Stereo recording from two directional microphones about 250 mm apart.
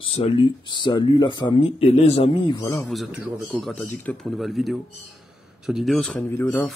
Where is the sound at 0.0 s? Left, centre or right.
Left.